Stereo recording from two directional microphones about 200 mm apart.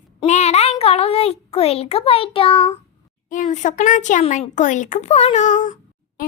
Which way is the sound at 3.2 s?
40° left (ahead or behind).